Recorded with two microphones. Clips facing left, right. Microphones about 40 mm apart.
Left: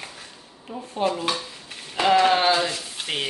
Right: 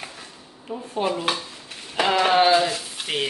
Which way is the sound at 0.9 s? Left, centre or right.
Centre.